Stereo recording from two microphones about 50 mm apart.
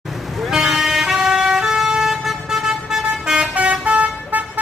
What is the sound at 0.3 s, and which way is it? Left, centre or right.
Vehicle, centre.